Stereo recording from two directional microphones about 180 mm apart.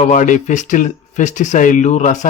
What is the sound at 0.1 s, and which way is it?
Speech, 45° left (ahead or behind).